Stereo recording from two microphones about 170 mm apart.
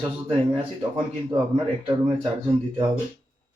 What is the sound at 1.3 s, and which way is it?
Speech, 20° right (ahead or behind).